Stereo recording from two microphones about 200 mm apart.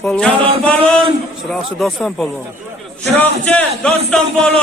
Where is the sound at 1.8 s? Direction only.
Centre (ahead or behind).